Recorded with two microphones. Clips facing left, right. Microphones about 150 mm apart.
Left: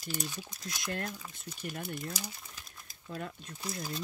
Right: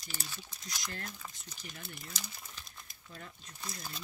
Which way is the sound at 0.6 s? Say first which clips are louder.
Left 7 dB; 55° left (ahead or behind).